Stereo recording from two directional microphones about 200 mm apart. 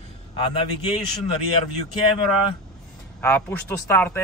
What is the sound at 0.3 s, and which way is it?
Speech, 30° left (ahead or behind).